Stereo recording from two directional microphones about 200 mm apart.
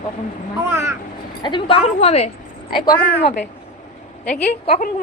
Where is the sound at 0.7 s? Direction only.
15° right (ahead or behind).